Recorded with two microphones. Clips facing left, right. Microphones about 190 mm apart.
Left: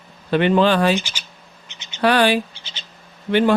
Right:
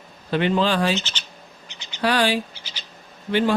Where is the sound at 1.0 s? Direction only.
10° left (ahead or behind).